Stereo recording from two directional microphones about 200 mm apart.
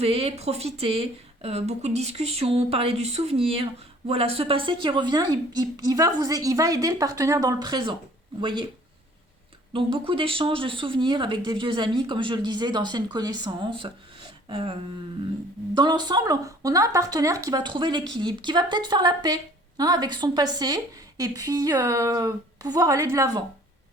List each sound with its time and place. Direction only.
0.0 s speech: 30° right (ahead or behind)
10.1 s speech: 25° right (ahead or behind)